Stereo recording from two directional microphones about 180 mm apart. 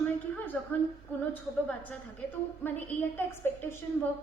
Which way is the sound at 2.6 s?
10° left (ahead or behind).